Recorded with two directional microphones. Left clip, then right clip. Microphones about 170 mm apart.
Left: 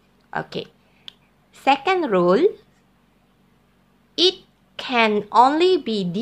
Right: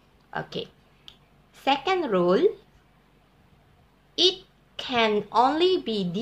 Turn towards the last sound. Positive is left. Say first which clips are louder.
# left 5 dB
turn(degrees=35)  # may be behind; listen again after turning